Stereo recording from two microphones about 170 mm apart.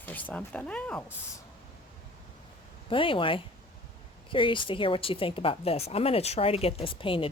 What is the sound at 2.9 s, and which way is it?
Speech, 30° left (ahead or behind).